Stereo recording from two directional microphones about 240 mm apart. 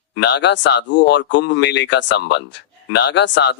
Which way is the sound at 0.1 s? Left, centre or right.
Left.